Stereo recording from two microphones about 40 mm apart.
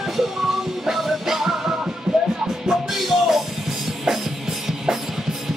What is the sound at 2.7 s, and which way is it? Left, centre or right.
Music, centre.